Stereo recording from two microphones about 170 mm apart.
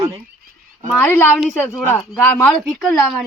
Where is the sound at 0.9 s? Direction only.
10° left (ahead or behind).